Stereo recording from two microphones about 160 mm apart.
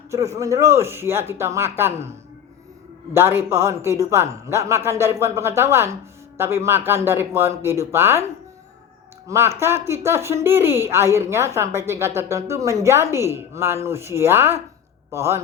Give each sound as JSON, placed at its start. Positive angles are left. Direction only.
{"t": 0.1, "sound": "speech", "side_deg": -20}
{"t": 3.2, "sound": "speech", "side_deg": -15}
{"t": 9.2, "sound": "a man's voice", "side_deg": -15}